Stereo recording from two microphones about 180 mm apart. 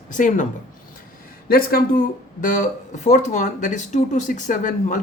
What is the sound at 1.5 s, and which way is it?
Speech, 55° left (ahead or behind).